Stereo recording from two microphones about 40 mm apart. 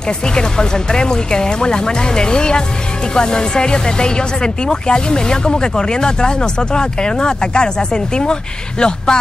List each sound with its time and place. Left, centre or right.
0.3 s speech: centre